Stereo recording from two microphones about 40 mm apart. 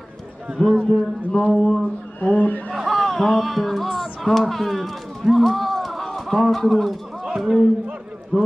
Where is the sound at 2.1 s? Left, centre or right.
Left.